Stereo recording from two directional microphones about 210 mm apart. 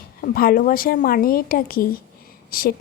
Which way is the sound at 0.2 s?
45° left (ahead or behind).